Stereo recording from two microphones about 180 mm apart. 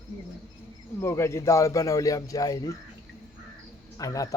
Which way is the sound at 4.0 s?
20° left (ahead or behind).